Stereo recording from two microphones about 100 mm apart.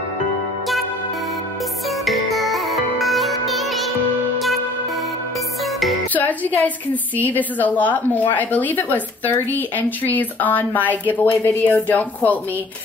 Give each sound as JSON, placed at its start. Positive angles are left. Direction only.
{"t": 2.0, "sound": "music", "side_deg": 0}
{"t": 6.1, "sound": "a woman's voice", "side_deg": 15}